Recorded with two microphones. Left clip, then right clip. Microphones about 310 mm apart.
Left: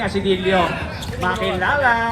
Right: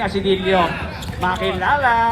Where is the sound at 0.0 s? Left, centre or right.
Right.